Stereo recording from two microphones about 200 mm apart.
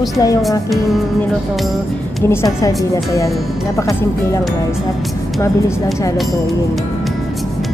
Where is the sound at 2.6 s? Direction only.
15° left (ahead or behind).